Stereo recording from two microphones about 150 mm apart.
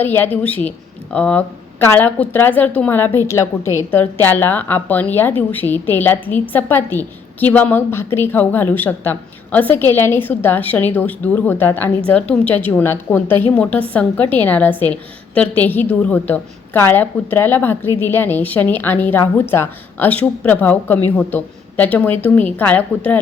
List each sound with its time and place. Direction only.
0.0 s a woman's voice: 15° left (ahead or behind)